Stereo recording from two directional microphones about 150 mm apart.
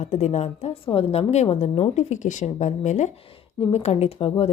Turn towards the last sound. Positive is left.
turn(degrees=45)  # may be behind; listen again after turning